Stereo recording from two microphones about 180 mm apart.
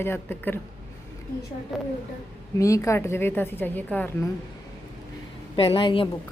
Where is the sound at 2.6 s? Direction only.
15° left (ahead or behind).